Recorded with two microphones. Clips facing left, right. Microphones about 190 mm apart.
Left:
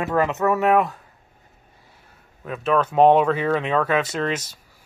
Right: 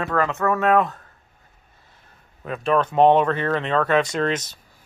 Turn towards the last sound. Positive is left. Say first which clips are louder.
# right 2 dB
turn(degrees=10)  # may be behind; listen again after turning